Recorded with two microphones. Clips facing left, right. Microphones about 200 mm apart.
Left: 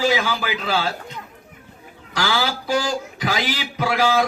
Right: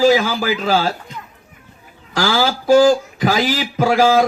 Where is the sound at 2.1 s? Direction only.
40° right (ahead or behind).